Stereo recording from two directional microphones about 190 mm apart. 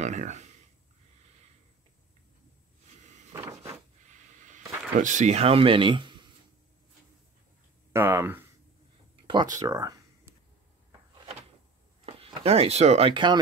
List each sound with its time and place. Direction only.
0.0 s speech: 40° right (ahead or behind)
3.3 s a sound: 15° right (ahead or behind)
5.0 s speech: 40° right (ahead or behind)
7.9 s speech: 15° right (ahead or behind)
12.4 s speech: 30° right (ahead or behind)